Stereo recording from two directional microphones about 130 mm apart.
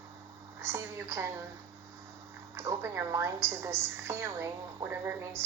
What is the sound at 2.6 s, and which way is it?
A woman's voice, 20° right (ahead or behind).